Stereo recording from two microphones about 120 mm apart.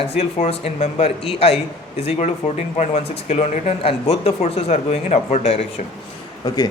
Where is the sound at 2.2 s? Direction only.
75° left (ahead or behind).